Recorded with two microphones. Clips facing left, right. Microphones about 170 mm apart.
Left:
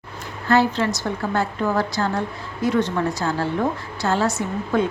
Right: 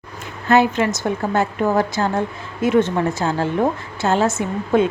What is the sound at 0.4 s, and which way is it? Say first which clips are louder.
A woman's voice: right 3 dB; 20° right (ahead or behind).